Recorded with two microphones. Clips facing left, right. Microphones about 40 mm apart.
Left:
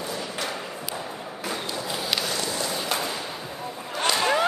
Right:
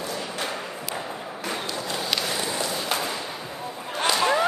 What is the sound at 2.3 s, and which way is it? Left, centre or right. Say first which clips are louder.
Walk: right 1 dB; right.